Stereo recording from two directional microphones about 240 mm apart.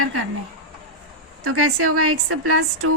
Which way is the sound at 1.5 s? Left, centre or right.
Right.